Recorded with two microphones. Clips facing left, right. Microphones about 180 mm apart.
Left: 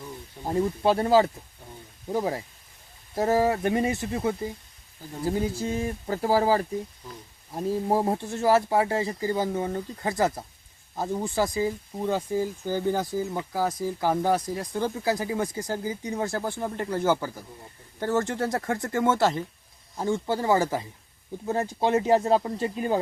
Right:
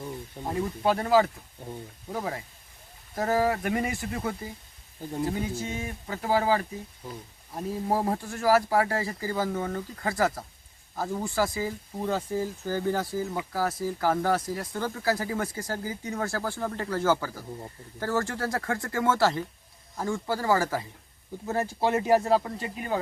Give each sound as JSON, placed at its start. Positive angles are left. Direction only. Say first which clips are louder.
{"t": 0.4, "sound": "speech", "louder": "left 3 dB", "side_deg": 30}
{"t": 5.3, "sound": "speech", "louder": "left 4 dB", "side_deg": 35}